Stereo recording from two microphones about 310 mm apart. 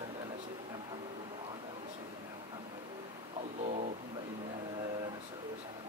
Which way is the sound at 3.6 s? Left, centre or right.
Right.